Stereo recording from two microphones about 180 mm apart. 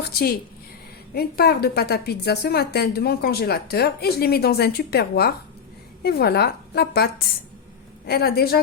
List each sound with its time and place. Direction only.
0.1 s a woman's voice: 55° left (ahead or behind)